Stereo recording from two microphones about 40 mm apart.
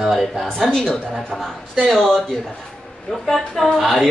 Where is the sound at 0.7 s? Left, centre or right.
Centre.